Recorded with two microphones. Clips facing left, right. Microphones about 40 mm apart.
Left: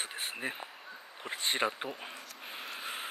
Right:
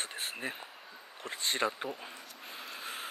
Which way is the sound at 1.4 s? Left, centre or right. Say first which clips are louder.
Even; centre.